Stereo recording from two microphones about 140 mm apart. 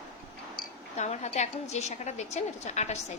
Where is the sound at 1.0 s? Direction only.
55° left (ahead or behind).